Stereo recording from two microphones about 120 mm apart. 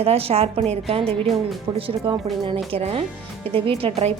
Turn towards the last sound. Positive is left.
turn(degrees=-55)  # may be behind; listen again after turning